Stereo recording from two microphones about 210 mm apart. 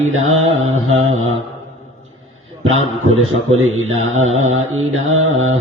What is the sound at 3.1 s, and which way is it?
Mantra, 80° right.